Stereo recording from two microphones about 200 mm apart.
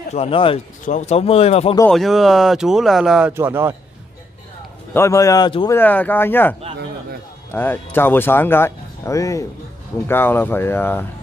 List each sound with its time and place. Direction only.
0.1 s speech: 30° left (ahead or behind)
1.9 s speech: centre (ahead or behind)
4.9 s speech: 15° left (ahead or behind)
5.8 s speech: 10° left (ahead or behind)
7.5 s speech: 10° left (ahead or behind)